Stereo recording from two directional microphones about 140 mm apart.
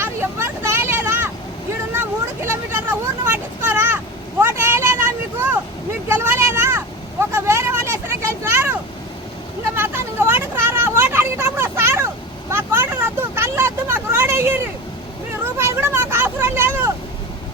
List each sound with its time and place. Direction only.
0.0 s vehicle: 15° right (ahead or behind)
9.7 s vehicle: 15° right (ahead or behind)